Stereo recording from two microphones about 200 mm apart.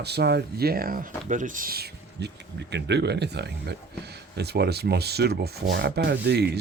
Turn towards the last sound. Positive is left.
turn(degrees=-55)  # may be behind; listen again after turning